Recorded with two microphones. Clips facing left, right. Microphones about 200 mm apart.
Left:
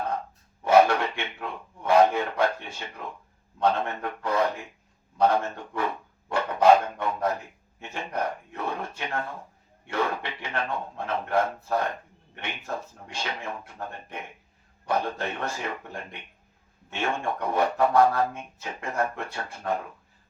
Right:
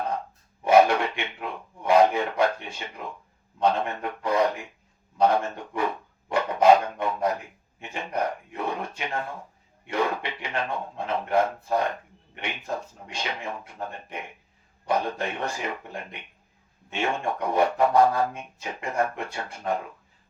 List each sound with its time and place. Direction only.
0.6 s a sound: 15° right (ahead or behind)
3.6 s speech: 15° right (ahead or behind)
6.2 s dog: 15° right (ahead or behind)
7.8 s speech: 15° right (ahead or behind)
16.9 s speech: 15° right (ahead or behind)